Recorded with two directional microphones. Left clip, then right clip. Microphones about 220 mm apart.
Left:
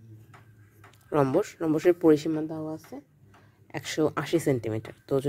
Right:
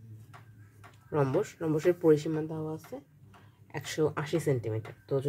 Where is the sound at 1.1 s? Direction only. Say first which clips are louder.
Left 5 dB; 35° left (ahead or behind).